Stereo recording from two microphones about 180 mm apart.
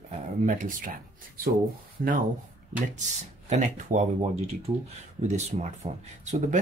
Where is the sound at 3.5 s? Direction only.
45° right (ahead or behind).